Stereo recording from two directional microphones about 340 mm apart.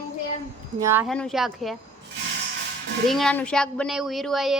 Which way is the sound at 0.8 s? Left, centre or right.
Centre.